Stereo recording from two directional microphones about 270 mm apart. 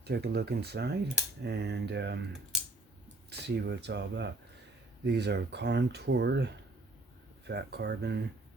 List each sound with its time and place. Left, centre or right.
0.0 s speech: right
3.2 s speech: right